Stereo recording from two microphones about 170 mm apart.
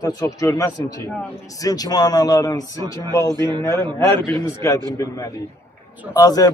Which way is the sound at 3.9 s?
25° right (ahead or behind).